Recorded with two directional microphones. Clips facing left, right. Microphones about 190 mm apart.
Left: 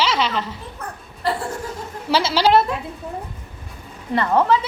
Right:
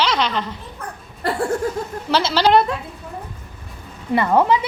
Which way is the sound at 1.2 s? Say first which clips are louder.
Even; 50° right (ahead or behind).